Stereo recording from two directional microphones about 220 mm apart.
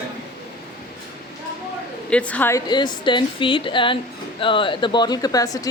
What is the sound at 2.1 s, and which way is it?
A woman's voice, 5° left (ahead or behind).